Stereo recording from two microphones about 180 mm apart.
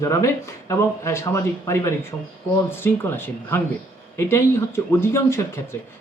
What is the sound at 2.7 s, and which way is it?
Speech, 10° left (ahead or behind).